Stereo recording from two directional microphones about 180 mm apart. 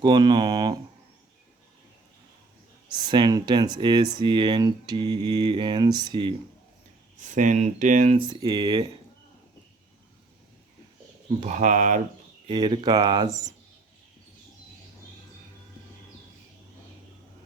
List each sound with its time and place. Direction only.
0.0 s speech: 25° right (ahead or behind)
2.9 s speech: 25° right (ahead or behind)
7.2 s speech: 45° right (ahead or behind)
8.2 s speech: 25° right (ahead or behind)
11.3 s speech: 40° right (ahead or behind)
12.5 s speech: 25° right (ahead or behind)